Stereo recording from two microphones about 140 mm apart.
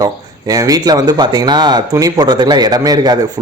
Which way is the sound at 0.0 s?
25° right (ahead or behind).